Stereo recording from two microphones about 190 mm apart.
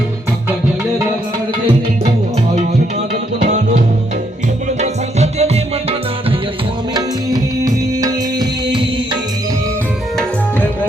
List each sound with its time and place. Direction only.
3.4 s music: 40° right (ahead or behind)
6.9 s music: 20° right (ahead or behind)